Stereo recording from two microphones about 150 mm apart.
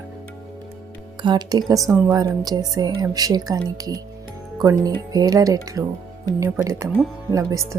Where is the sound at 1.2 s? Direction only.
30° right (ahead or behind).